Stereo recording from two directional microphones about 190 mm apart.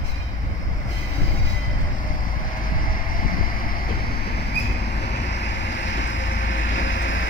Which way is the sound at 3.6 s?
50° left (ahead or behind).